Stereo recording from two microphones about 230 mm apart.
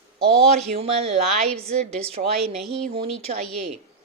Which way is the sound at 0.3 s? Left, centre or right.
Right.